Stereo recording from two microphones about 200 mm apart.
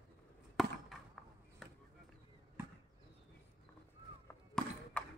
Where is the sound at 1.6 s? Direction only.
Centre (ahead or behind).